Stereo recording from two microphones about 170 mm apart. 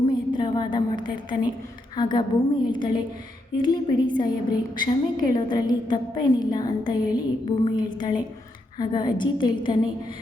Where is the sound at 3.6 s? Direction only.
25° left (ahead or behind).